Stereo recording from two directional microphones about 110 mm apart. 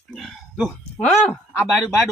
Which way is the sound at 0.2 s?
Centre (ahead or behind).